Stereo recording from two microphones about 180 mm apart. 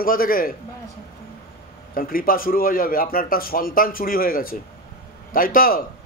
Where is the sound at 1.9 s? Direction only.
50° left (ahead or behind).